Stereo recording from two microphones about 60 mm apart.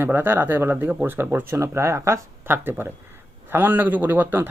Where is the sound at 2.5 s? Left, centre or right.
Right.